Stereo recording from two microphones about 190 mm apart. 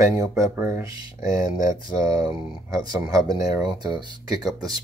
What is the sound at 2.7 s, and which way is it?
Speech, 20° right (ahead or behind).